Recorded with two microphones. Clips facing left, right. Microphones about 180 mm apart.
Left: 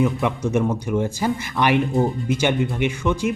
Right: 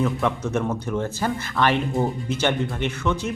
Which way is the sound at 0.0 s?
15° left (ahead or behind).